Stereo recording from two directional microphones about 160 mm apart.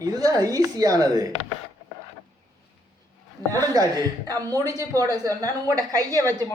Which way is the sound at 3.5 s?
25° right (ahead or behind).